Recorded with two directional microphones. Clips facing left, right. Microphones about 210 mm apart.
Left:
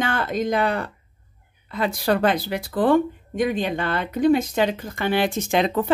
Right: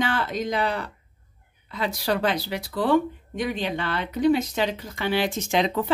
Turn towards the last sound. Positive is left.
turn(degrees=55)  # may be behind; listen again after turning